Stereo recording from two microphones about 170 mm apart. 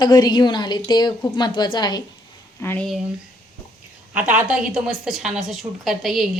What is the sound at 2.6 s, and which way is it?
Speech, 15° left (ahead or behind).